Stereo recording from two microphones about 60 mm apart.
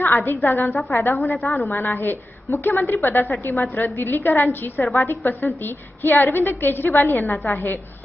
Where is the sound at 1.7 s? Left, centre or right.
Left.